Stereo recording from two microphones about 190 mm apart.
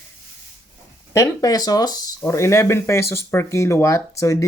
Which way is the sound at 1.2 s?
20° left (ahead or behind).